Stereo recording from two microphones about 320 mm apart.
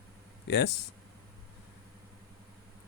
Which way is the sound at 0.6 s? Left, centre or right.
Left.